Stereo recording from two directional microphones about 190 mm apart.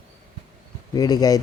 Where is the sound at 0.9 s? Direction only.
20° left (ahead or behind).